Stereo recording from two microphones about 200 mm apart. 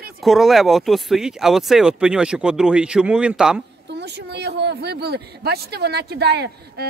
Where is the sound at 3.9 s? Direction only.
55° right (ahead or behind).